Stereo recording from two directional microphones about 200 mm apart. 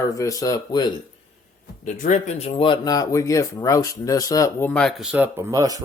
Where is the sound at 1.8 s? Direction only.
40° left (ahead or behind).